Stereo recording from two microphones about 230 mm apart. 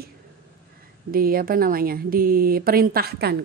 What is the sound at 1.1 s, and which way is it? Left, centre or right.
Speech, right.